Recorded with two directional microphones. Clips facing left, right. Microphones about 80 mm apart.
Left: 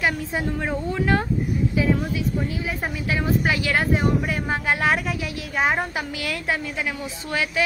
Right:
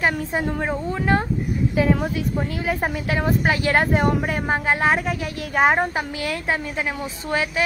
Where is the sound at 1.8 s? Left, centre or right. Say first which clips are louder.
Right 3 dB; right.